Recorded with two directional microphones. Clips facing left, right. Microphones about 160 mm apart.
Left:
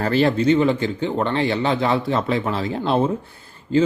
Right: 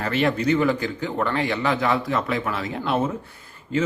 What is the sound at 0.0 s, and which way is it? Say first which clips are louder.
Speech: left 4 dB; 35° left (ahead or behind).